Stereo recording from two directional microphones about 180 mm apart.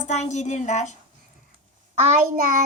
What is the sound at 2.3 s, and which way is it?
Child singing, 50° right (ahead or behind).